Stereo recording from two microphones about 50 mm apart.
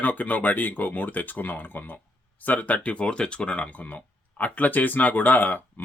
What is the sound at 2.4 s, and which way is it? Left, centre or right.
Speech, left.